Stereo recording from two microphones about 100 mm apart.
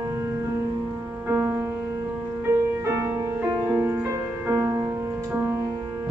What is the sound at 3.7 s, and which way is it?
Music, 25° right (ahead or behind).